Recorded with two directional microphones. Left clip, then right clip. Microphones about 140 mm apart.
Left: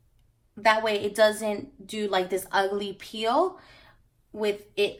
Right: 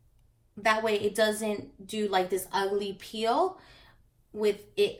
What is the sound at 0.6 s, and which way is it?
Speech, 35° left (ahead or behind).